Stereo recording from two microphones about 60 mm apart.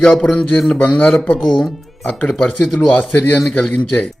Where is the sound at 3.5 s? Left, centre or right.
Centre.